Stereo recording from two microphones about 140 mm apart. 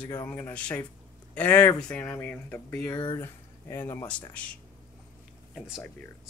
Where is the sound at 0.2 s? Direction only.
15° left (ahead or behind).